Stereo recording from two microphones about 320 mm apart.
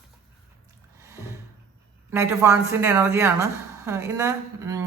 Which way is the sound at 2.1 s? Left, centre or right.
Centre.